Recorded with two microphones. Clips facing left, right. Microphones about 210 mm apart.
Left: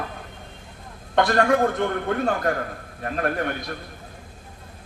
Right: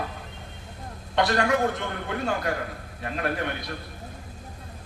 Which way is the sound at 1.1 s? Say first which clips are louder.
Left 4 dB; 50° left (ahead or behind).